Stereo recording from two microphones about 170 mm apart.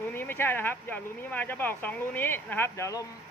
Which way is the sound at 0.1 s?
15° left (ahead or behind).